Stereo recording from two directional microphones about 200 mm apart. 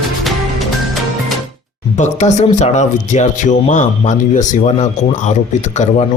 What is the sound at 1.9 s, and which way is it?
A man's voice, 35° left (ahead or behind).